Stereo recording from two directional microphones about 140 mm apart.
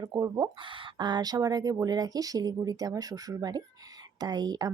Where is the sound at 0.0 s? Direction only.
30° right (ahead or behind).